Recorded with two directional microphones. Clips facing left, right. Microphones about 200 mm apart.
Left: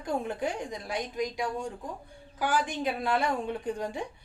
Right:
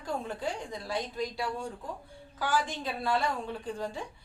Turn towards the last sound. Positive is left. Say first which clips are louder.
# left 3 dB
turn(degrees=20)  # may be behind; listen again after turning